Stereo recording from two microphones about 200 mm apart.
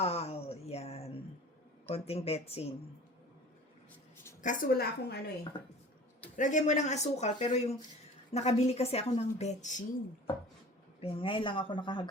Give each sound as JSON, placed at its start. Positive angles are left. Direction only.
{"t": 0.0, "sound": "a sound", "side_deg": 30}
{"t": 1.9, "sound": "a woman's voice", "side_deg": 30}
{"t": 4.4, "sound": "a woman's voice", "side_deg": 45}
{"t": 5.5, "sound": "speech", "side_deg": 20}
{"t": 6.3, "sound": "a woman's voice", "side_deg": 40}
{"t": 11.0, "sound": "speech", "side_deg": 25}